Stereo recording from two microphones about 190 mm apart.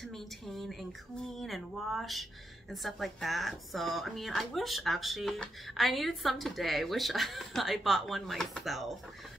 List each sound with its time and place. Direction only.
0.0 s speech: centre (ahead or behind)